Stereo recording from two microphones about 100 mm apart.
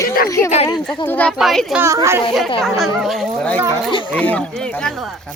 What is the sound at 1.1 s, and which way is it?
Speech, 15° left (ahead or behind).